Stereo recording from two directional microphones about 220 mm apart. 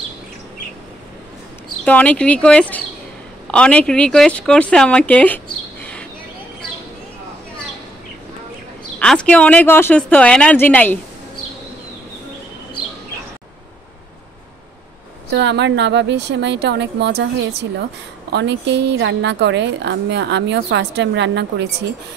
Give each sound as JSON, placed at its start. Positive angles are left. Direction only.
{"t": 1.9, "sound": "speech", "side_deg": 5}
{"t": 9.0, "sound": "speech", "side_deg": 5}
{"t": 15.3, "sound": "a woman's voice", "side_deg": -55}
{"t": 18.3, "sound": "a woman's voice", "side_deg": -50}